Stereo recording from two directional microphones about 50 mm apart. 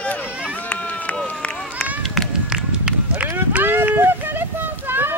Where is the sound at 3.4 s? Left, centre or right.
Right.